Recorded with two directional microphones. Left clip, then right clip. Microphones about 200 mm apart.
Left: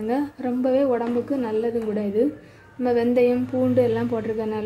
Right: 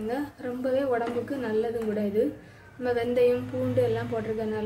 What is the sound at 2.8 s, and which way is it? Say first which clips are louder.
Speech: left 4 dB; 30° left (ahead or behind).